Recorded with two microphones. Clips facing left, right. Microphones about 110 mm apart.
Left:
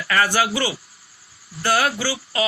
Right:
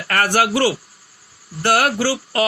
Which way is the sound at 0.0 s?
55° right (ahead or behind).